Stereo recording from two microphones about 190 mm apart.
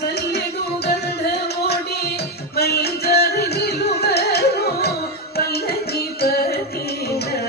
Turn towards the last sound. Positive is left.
turn(degrees=55)  # may be behind; listen again after turning